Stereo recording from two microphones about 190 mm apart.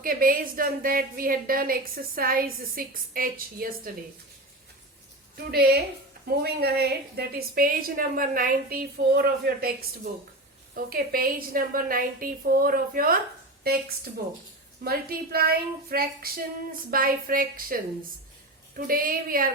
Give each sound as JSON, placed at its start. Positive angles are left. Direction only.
{"t": 0.0, "sound": "a woman's voice", "side_deg": -50}
{"t": 5.5, "sound": "a woman's voice", "side_deg": -55}
{"t": 14.8, "sound": "a woman's voice", "side_deg": -50}
{"t": 18.9, "sound": "a woman's voice", "side_deg": -50}